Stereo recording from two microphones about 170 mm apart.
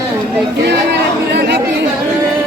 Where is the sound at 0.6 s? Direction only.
90° right.